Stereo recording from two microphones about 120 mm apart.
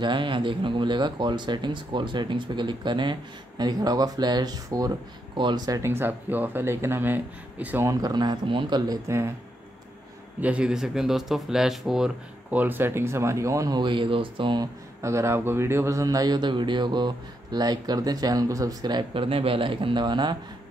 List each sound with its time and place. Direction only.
0.0 s speech: 40° right (ahead or behind)
5.8 s speech: 20° right (ahead or behind)
7.9 s speech: 35° right (ahead or behind)
10.4 s speech: 10° right (ahead or behind)
12.4 s speech: 15° right (ahead or behind); by 14.7 s 40° right (ahead or behind)
15.0 s speech: 25° right (ahead or behind); by 20.3 s 40° right (ahead or behind)